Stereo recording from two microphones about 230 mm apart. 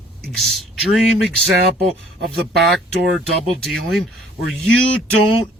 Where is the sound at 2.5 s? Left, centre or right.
Centre.